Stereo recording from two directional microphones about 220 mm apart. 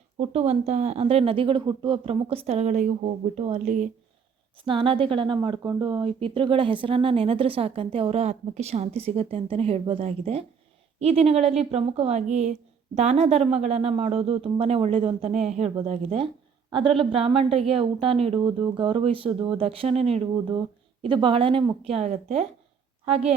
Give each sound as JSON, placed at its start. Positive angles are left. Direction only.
{"t": 0.2, "sound": "speech", "side_deg": -30}